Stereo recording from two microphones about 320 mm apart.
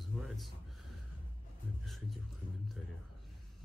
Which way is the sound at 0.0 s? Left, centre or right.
Centre.